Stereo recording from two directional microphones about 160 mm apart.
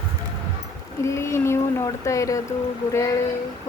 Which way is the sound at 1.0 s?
15° left (ahead or behind).